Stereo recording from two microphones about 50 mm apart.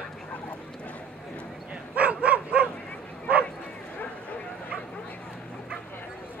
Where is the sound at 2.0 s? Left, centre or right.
Right.